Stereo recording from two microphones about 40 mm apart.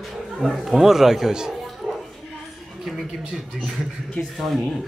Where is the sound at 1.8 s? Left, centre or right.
Right.